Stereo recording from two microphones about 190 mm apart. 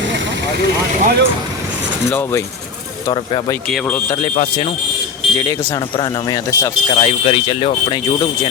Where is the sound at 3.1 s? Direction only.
25° left (ahead or behind).